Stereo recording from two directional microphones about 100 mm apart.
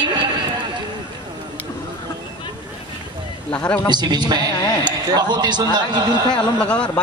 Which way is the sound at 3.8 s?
45° right (ahead or behind).